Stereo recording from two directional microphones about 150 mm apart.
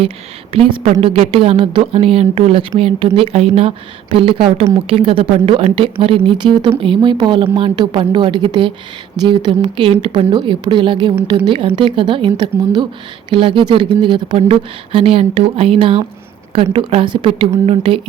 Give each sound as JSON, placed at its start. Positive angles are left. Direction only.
{"t": 0.5, "sound": "speech", "side_deg": -40}